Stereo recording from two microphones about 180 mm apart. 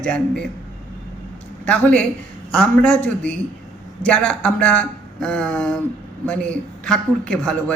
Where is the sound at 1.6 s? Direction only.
5° left (ahead or behind).